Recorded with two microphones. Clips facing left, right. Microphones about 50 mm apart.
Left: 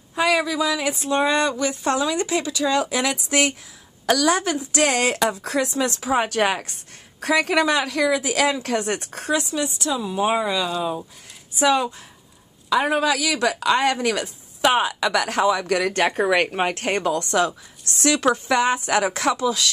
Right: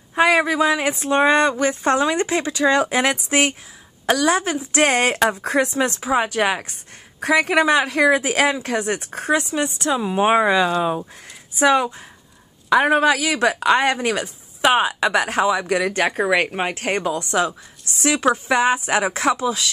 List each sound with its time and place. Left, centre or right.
0.1 s speech: right
8.5 s speech: right
9.3 s speech: right